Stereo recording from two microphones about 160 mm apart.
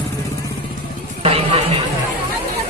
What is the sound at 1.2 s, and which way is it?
Chatter, 40° right (ahead or behind).